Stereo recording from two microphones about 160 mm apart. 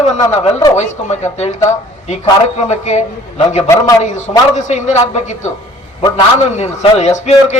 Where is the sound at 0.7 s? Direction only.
45° left (ahead or behind).